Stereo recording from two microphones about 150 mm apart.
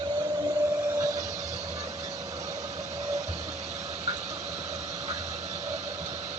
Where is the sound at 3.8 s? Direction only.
45° right (ahead or behind).